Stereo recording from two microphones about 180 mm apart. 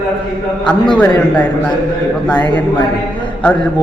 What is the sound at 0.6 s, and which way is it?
Speech, 5° left (ahead or behind).